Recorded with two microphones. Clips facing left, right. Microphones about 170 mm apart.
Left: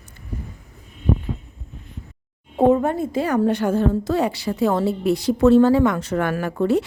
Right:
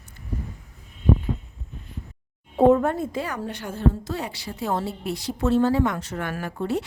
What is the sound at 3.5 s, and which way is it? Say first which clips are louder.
A woman's voice: left 6 dB; 90° left.